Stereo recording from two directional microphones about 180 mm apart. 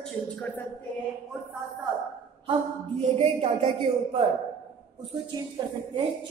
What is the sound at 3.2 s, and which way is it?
A woman's voice, 30° right (ahead or behind).